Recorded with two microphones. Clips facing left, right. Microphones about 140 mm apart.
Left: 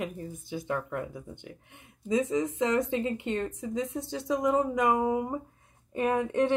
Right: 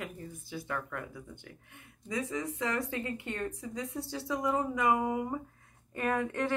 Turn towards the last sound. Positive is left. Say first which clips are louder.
# left 5 dB
turn(degrees=20)  # may be behind; listen again after turning